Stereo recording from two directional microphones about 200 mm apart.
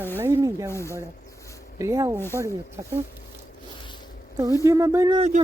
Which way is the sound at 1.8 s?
15° right (ahead or behind).